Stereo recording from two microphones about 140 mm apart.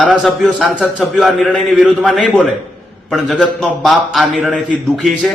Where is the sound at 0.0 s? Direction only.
Centre (ahead or behind).